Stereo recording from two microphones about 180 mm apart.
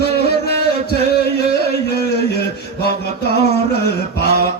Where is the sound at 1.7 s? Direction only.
60° left (ahead or behind).